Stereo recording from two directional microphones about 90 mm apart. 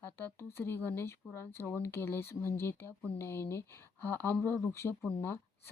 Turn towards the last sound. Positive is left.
turn(degrees=25)  # may be behind; listen again after turning